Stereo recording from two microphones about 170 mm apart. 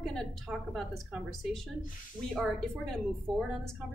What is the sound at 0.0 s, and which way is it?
A woman's voice, centre (ahead or behind).